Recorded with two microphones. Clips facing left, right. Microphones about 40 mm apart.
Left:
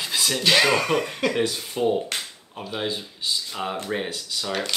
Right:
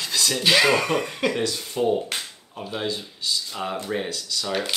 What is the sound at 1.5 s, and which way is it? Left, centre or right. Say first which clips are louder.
Speech: even; centre.